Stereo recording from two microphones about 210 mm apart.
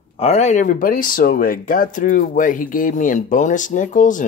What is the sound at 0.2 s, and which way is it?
Speech, 30° left (ahead or behind).